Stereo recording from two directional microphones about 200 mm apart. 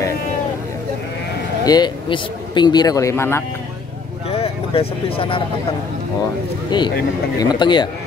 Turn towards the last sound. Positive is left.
turn(degrees=20)  # may be behind; listen again after turning